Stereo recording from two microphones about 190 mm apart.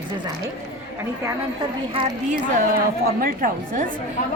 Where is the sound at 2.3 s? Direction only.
45° right (ahead or behind).